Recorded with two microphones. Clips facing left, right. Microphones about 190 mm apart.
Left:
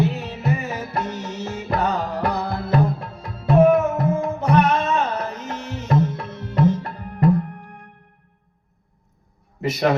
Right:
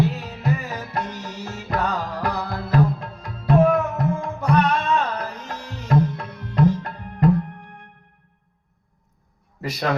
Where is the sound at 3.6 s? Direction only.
25° left (ahead or behind).